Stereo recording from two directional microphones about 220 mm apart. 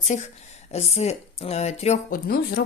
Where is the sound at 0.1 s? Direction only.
35° left (ahead or behind).